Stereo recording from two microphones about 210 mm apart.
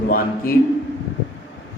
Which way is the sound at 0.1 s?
45° left (ahead or behind).